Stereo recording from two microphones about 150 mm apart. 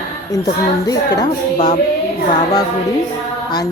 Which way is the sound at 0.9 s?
25° left (ahead or behind).